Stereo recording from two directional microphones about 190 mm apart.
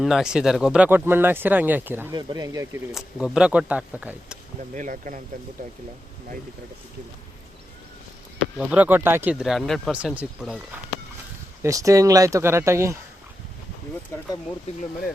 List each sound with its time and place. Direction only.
0.0 s speech: centre (ahead or behind); by 2.8 s 15° right (ahead or behind)
2.9 s speech: centre (ahead or behind)
4.7 s speech: 45° right (ahead or behind)
8.5 s speech: 5° right (ahead or behind)
11.6 s speech: 15° right (ahead or behind)